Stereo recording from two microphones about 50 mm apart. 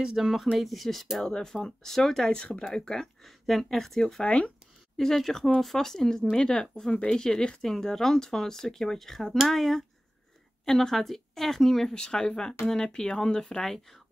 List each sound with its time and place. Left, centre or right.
0.0 s speech: centre
1.3 s speech: centre
4.2 s speech: left
4.9 s speech: centre